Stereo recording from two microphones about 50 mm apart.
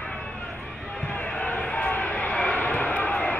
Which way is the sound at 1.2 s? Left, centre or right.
Left.